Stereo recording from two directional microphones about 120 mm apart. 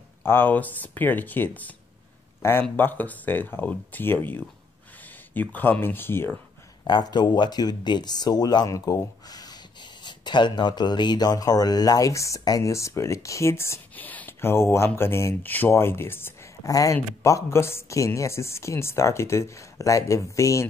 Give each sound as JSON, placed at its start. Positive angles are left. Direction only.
{"t": 0.2, "sound": "speech", "side_deg": 15}
{"t": 6.8, "sound": "speech", "side_deg": 35}